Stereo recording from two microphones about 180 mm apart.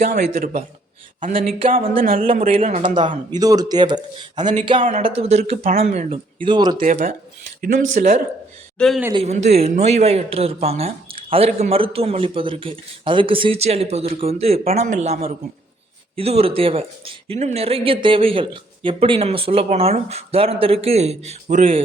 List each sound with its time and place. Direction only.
0.0 s a man's voice: 60° right (ahead or behind)
0.3 s speech: 50° right (ahead or behind)
2.5 s speech: 35° right (ahead or behind)
3.3 s speech: 20° right (ahead or behind)
6.8 s speech: 45° right (ahead or behind)
8.8 s speech: 5° left (ahead or behind)
9.1 s speech: 40° right (ahead or behind)